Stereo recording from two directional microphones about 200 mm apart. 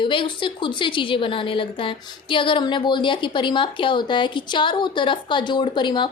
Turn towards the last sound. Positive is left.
turn(degrees=25)  # may be behind; listen again after turning